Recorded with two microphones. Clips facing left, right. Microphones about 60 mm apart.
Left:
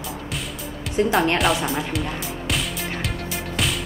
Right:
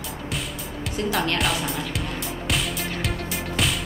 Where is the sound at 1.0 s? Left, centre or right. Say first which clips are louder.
Left 7 dB; left.